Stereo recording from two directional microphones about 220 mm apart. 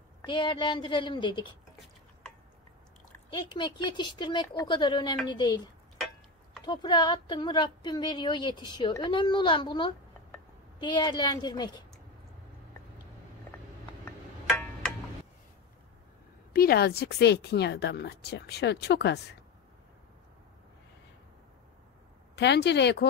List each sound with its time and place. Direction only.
0.3 s speech: 20° left (ahead or behind)
3.3 s speech: 20° left (ahead or behind)
6.6 s speech: 20° left (ahead or behind)
16.5 s a woman's voice: 45° left (ahead or behind)
22.3 s a woman's voice: 50° left (ahead or behind)